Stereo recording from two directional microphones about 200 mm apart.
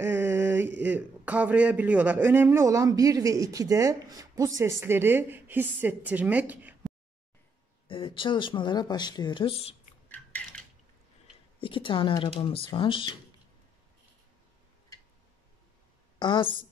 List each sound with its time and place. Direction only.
0.0 s mantra: 10° right (ahead or behind)
0.8 s a man's voice: 10° right (ahead or behind)
7.9 s speech: 25° left (ahead or behind)
10.0 s a sound: 10° left (ahead or behind)
11.6 s speech: 25° left (ahead or behind)
16.2 s speech: 25° left (ahead or behind)